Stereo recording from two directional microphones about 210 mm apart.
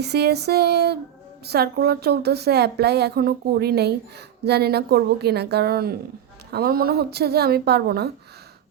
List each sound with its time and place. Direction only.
0.0 s speech: 50° right (ahead or behind)